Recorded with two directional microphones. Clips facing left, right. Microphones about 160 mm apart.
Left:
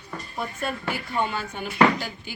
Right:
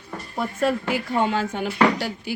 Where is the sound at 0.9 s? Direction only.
90° right.